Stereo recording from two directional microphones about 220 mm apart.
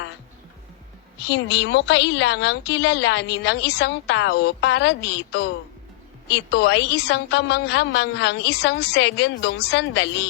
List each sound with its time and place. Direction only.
1.3 s a woman's voice: 50° left (ahead or behind)